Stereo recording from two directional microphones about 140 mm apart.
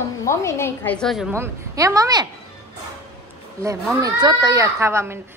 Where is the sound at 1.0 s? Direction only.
Centre (ahead or behind).